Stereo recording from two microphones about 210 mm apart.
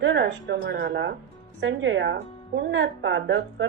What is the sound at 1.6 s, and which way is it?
A woman's voice, 60° right (ahead or behind).